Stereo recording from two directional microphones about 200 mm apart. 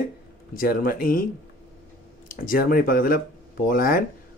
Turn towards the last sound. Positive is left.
turn(degrees=45)  # may be behind; listen again after turning